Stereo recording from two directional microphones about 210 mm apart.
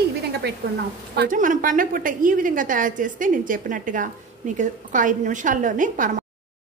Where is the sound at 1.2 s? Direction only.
40° right (ahead or behind).